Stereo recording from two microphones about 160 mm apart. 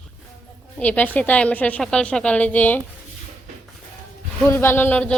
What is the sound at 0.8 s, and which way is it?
A woman's voice, 10° left (ahead or behind).